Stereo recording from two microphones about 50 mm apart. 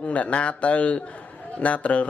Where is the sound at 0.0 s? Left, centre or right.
Left.